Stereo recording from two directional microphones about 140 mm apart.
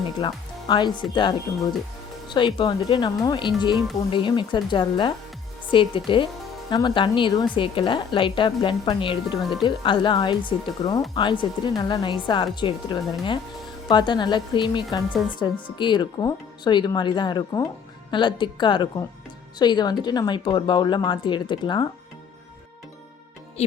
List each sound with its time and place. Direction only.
0.2 s speech: 30° left (ahead or behind)
9.4 s speech: centre (ahead or behind)
9.6 s speech: 35° left (ahead or behind)
23.6 s speech: 50° left (ahead or behind)